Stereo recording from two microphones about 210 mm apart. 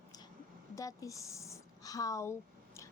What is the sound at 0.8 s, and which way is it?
A woman's voice, 15° left (ahead or behind).